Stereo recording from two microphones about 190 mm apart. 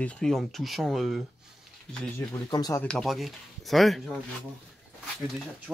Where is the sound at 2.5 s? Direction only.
20° left (ahead or behind).